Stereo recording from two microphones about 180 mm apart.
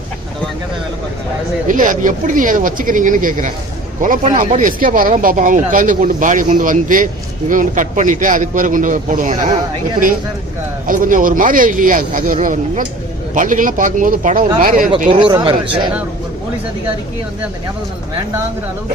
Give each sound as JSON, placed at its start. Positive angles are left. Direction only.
{"t": 1.6, "sound": "speech", "side_deg": -45}
{"t": 10.8, "sound": "speech", "side_deg": -50}
{"t": 15.3, "sound": "speech", "side_deg": -25}